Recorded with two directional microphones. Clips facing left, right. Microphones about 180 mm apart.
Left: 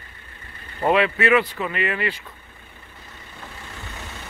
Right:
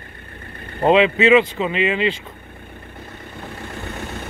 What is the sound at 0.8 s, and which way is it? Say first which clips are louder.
Speech: right 5 dB; 20° right (ahead or behind).